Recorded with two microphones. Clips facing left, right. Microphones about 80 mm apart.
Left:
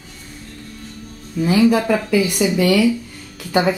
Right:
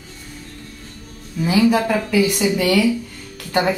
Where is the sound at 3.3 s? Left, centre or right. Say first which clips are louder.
Left 2 dB; centre.